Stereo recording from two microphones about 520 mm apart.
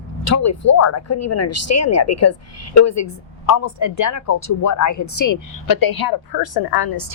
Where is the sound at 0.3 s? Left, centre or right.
Left.